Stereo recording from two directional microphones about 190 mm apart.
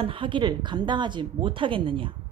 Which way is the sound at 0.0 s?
25° right (ahead or behind).